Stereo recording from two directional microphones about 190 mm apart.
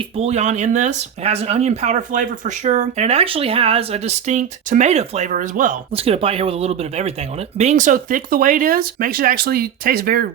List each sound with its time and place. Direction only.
0.2 s speech: 35° right (ahead or behind)
5.9 s speech: 30° right (ahead or behind); by 10.2 s 50° right (ahead or behind)